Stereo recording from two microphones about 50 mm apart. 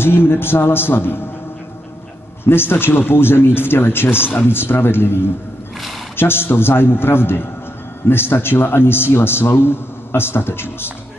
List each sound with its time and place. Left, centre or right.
0.0 s a man's voice: left
2.4 s a man's voice: left